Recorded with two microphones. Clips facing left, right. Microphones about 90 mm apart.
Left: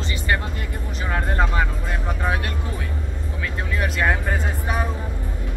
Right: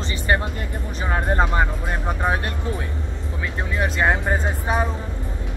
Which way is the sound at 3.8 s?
25° right (ahead or behind).